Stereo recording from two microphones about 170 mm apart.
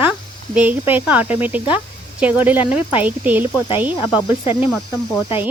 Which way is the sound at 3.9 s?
25° left (ahead or behind).